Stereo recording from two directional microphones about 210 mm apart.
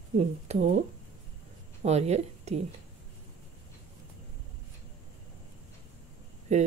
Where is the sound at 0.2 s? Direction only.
30° right (ahead or behind).